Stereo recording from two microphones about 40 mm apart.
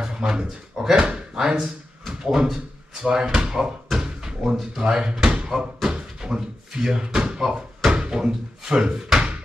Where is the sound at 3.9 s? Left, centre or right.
Centre.